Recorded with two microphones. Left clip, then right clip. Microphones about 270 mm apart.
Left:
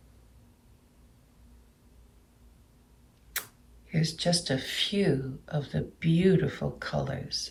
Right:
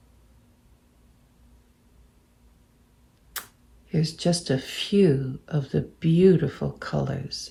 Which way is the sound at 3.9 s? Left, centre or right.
Centre.